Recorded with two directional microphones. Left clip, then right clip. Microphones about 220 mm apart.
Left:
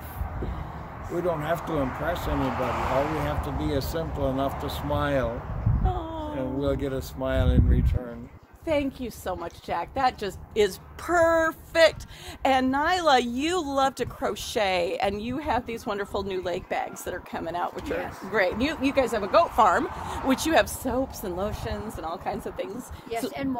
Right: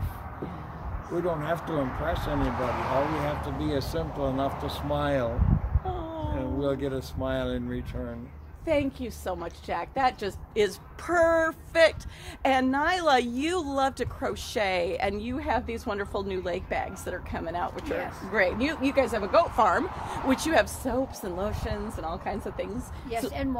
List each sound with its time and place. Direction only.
1.1 s speech: centre (ahead or behind)
3.0 s speech: 35° right (ahead or behind)
3.3 s speech: centre (ahead or behind)
6.3 s speech: centre (ahead or behind)
8.6 s a woman's voice: 15° left (ahead or behind)